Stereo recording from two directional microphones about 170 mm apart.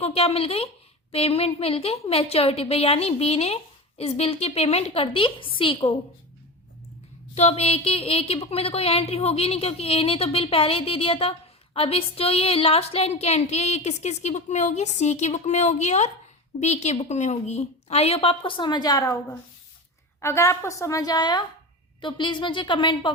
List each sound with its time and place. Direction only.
0.0 s a woman's voice: 35° left (ahead or behind)
7.3 s a woman's voice: 35° left (ahead or behind); by 19.2 s 20° left (ahead or behind)
20.2 s a woman's voice: 15° left (ahead or behind)